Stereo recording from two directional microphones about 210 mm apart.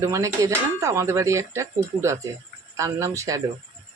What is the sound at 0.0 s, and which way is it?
Speech, 15° right (ahead or behind).